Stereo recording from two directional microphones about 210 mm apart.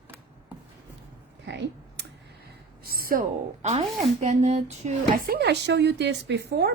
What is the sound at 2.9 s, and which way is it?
Speech, 45° right (ahead or behind).